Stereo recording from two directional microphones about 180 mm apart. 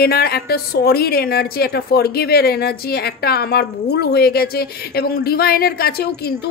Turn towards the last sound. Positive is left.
turn(degrees=60)  # may be behind; listen again after turning